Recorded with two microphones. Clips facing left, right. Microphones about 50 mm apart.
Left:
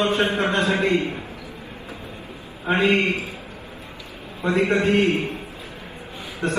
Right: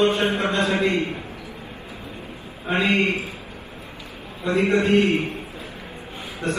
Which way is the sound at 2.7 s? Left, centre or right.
Left.